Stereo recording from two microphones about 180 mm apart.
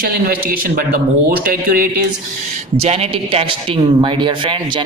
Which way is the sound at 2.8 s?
35° right (ahead or behind).